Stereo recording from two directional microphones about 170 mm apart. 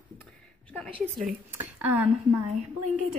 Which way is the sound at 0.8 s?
Centre (ahead or behind).